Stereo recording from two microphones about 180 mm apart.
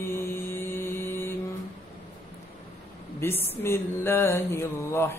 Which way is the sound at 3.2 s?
15° left (ahead or behind).